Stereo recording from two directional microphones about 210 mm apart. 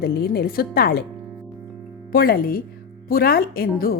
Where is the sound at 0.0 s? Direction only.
45° left (ahead or behind).